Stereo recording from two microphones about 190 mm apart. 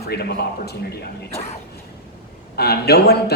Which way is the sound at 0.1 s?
60° left (ahead or behind).